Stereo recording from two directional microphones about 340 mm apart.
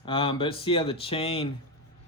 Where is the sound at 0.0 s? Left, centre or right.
Centre.